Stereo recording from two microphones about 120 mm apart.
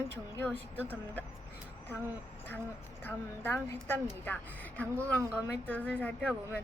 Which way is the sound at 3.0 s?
20° left (ahead or behind).